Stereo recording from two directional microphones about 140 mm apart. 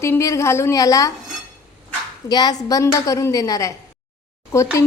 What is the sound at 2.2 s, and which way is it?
A woman's voice, 30° left (ahead or behind).